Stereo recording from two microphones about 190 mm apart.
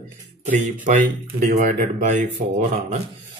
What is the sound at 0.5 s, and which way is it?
Speech, 40° right (ahead or behind).